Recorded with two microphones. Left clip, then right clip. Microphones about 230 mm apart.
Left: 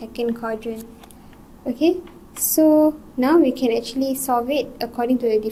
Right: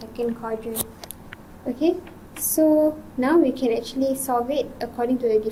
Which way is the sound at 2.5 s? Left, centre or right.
Left.